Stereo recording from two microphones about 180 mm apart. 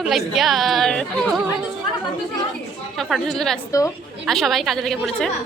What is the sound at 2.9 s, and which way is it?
A woman's voice, centre (ahead or behind).